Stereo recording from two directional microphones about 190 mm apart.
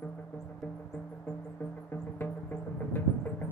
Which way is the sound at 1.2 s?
10° left (ahead or behind).